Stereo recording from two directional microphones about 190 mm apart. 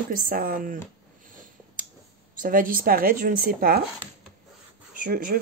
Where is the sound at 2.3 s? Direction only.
45° right (ahead or behind).